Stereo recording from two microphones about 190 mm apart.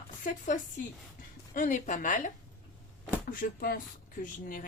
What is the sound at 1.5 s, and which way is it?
Speech, 40° left (ahead or behind).